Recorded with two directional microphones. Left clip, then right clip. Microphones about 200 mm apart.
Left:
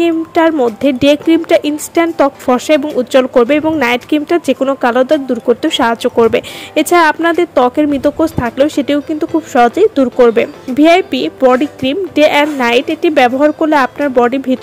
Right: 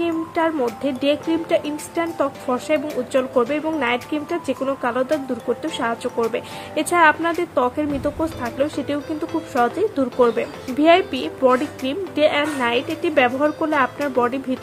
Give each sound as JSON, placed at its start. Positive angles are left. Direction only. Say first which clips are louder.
{"t": 0.0, "sound": "speech", "louder": "left 10 dB", "side_deg": 40}